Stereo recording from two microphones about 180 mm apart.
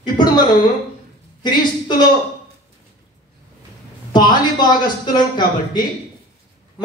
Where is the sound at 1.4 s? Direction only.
25° left (ahead or behind).